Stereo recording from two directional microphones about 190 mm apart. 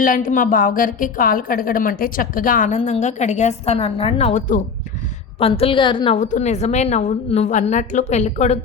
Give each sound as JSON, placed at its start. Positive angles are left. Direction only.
{"t": 0.0, "sound": "a woman's voice", "side_deg": 45}
{"t": 5.4, "sound": "a woman's voice", "side_deg": 30}